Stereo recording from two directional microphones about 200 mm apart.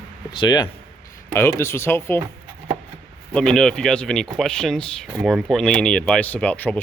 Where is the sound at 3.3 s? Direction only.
5° left (ahead or behind).